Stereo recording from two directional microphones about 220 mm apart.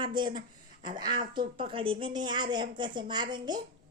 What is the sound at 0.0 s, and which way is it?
Speech, 20° right (ahead or behind).